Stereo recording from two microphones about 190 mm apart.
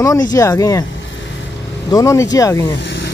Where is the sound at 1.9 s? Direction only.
15° left (ahead or behind).